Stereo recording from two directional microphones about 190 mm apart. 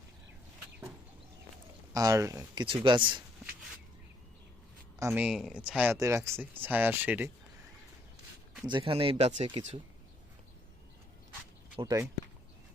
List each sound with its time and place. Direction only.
1.9 s speech: 20° right (ahead or behind)
4.9 s speech: 10° right (ahead or behind)
8.6 s speech: 25° right (ahead or behind)
11.8 s speech: 20° right (ahead or behind)